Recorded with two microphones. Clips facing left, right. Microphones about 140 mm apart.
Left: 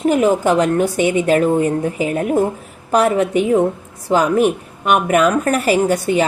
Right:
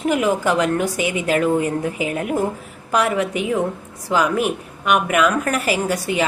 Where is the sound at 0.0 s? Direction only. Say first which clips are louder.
Left 4 dB; 35° left (ahead or behind).